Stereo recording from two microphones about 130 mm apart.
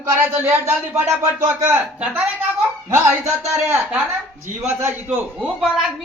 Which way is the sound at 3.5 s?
20° right (ahead or behind).